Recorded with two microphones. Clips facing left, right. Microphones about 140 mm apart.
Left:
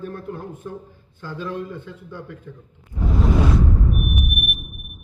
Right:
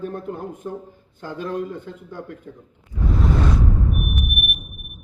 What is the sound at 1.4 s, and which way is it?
Speech, 50° right (ahead or behind).